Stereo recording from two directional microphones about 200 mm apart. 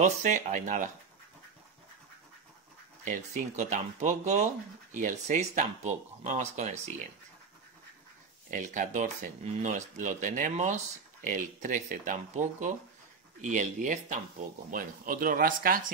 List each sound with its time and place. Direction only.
0.0 s speech: 40° right (ahead or behind)
3.1 s speech: 35° right (ahead or behind)
8.5 s speech: 40° right (ahead or behind)